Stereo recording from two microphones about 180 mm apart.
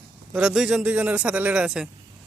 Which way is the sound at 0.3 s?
5° right (ahead or behind).